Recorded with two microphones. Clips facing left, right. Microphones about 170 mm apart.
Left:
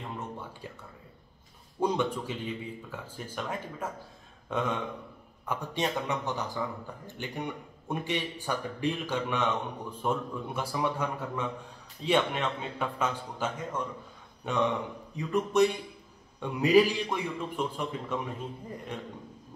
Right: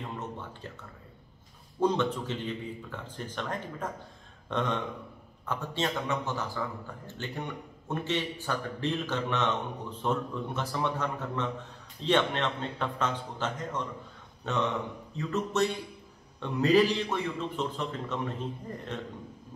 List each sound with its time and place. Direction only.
1.8 s a man's voice: 10° left (ahead or behind)